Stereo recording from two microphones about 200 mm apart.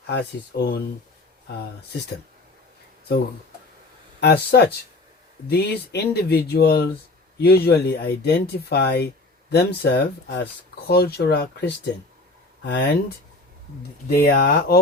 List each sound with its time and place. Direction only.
0.1 s speech: 55° left (ahead or behind)
4.2 s speech: 55° left (ahead or behind)
14.1 s speech: 50° left (ahead or behind)